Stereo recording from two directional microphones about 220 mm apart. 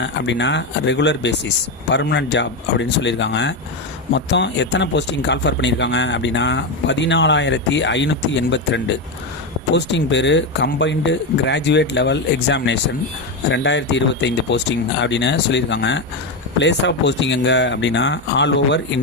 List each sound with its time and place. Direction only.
0.0 s speech: 55° left (ahead or behind)